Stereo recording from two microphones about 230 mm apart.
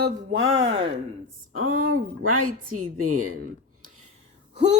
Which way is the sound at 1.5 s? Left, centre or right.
Right.